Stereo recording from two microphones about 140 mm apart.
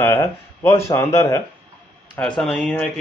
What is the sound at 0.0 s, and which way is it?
Speech, 20° left (ahead or behind).